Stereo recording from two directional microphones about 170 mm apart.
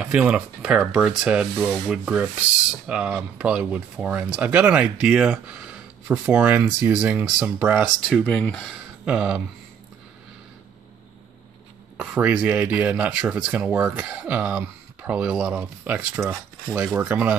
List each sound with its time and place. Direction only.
0.0 s speech: 5° right (ahead or behind)
8.0 s speech: 5° left (ahead or behind)
9.0 s speech: 5° right (ahead or behind)
12.0 s speech: 5° right (ahead or behind)